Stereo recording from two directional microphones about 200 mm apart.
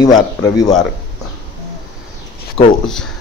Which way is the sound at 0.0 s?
20° left (ahead or behind).